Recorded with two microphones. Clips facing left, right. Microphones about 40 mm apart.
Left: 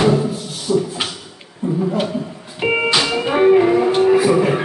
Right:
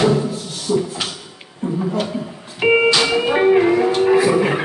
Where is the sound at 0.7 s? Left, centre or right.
Centre.